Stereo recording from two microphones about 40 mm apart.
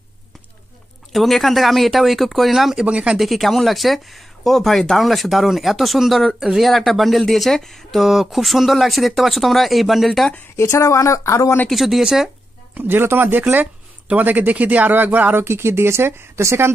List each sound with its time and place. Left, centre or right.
1.1 s speech: centre
2.8 s speech: right
3.2 s speech: centre
8.0 s speech: centre
11.7 s speech: centre
12.7 s speech: right
15.3 s speech: right